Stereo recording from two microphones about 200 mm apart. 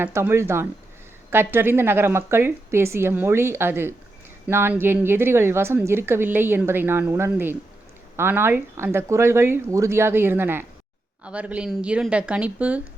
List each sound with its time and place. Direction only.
0.0 s a woman's voice: 10° right (ahead or behind)